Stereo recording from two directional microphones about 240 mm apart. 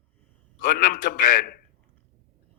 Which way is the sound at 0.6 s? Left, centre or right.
Left.